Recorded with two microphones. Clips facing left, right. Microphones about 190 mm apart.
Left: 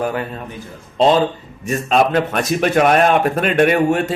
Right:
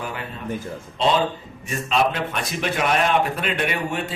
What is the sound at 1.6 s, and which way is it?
A man's voice, 50° left (ahead or behind).